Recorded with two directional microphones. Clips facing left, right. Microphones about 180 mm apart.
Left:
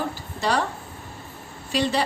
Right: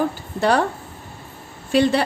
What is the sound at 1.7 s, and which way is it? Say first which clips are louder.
Speech: right 7 dB; 55° right (ahead or behind).